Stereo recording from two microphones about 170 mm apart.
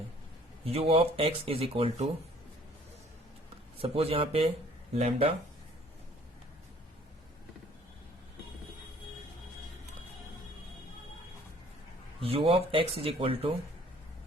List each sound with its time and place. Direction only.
0.6 s speech: 35° right (ahead or behind)
3.8 s speech: 35° right (ahead or behind)
12.2 s speech: 35° right (ahead or behind)